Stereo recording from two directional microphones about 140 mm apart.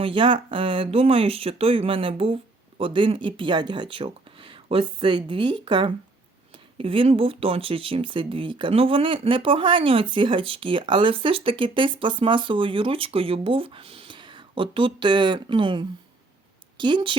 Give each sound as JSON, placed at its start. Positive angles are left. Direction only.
{"t": 0.0, "sound": "a woman's voice", "side_deg": -35}